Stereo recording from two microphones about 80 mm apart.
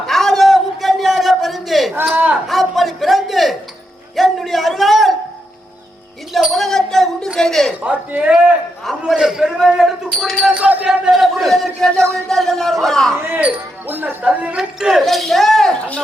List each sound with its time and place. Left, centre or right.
0.0 s a sound: centre
2.1 s speech: right
2.5 s a sound: centre
6.5 s a sound: centre
7.3 s a man's voice: centre
7.9 s a man's voice: centre
8.8 s a man's voice: centre
10.5 s a man's voice: centre
10.8 s a man's voice: centre
13.1 s speech: right
14.4 s a man's voice: centre